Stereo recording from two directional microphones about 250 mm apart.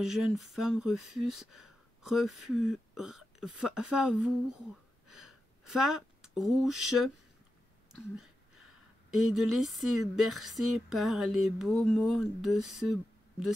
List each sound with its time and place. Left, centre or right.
0.0 s speech: centre
5.0 s a sound: centre
9.1 s speech: centre